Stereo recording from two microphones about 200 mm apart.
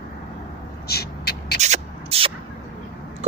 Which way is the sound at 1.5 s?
35° right (ahead or behind).